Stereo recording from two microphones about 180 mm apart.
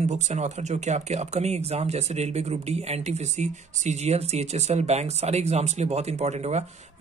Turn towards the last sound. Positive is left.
turn(degrees=-40)  # may be behind; listen again after turning